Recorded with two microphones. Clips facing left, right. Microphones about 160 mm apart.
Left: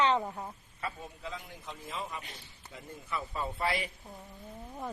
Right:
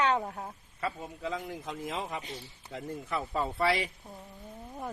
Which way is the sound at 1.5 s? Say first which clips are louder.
Right 7 dB; 90° right.